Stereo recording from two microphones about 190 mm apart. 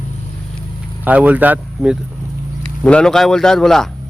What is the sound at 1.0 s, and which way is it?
Speech, 10° right (ahead or behind).